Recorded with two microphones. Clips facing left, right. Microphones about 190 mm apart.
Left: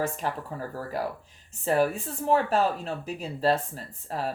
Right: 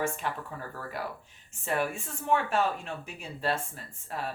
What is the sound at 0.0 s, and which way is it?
Speech, 40° left (ahead or behind).